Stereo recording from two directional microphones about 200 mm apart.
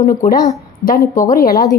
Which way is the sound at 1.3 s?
45° left (ahead or behind).